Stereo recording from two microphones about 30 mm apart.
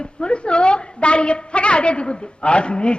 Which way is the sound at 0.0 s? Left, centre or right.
Left.